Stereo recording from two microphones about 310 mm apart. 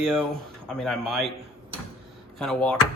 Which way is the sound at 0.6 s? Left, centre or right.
Centre.